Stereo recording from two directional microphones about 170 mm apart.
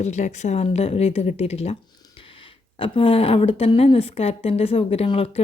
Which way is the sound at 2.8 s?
30° left (ahead or behind).